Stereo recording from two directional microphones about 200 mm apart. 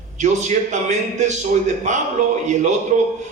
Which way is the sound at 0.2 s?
35° right (ahead or behind).